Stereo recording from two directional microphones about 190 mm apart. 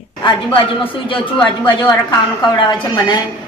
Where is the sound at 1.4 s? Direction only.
25° left (ahead or behind).